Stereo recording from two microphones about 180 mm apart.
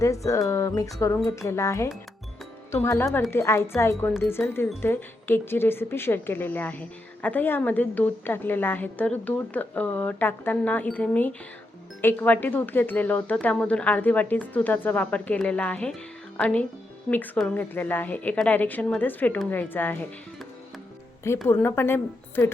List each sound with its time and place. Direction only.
0.3 s speech: 15° left (ahead or behind)
21.4 s speech: 10° left (ahead or behind)